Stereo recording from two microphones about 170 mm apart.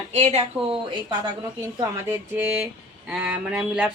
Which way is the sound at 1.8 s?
15° right (ahead or behind).